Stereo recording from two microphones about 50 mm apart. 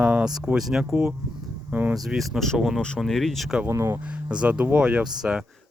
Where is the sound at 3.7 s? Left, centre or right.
Right.